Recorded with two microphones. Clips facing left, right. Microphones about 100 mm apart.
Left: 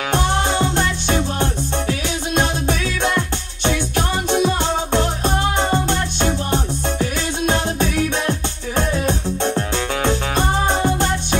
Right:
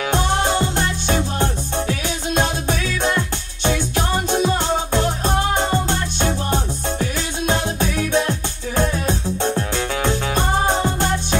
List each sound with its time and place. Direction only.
0.1 s music: 55° left (ahead or behind)
3.0 s music: 55° left (ahead or behind)
6.5 s music: 55° left (ahead or behind)